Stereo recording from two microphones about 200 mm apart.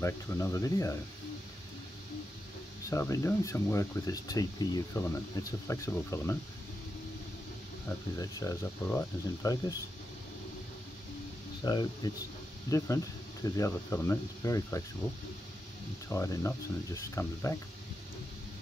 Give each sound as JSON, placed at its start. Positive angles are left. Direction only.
{"t": 0.0, "sound": "speech", "side_deg": 15}
{"t": 2.9, "sound": "speech", "side_deg": 15}
{"t": 8.2, "sound": "speech", "side_deg": 15}
{"t": 11.6, "sound": "speech", "side_deg": 20}
{"t": 16.1, "sound": "speech", "side_deg": 15}